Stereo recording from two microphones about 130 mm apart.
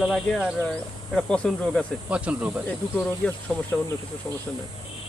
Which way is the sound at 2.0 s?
10° right (ahead or behind).